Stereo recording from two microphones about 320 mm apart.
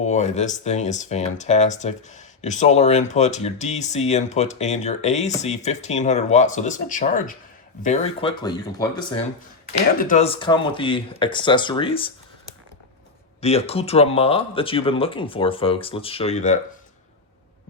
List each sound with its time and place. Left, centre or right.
0.0 s speech: left
13.4 s speech: centre